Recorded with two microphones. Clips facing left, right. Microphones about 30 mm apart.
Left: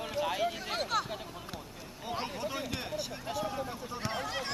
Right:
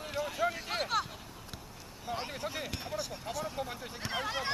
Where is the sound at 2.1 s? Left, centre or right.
Centre.